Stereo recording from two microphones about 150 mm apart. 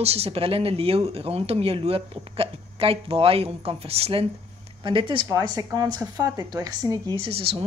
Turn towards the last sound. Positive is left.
turn(degrees=-40)  # may be behind; listen again after turning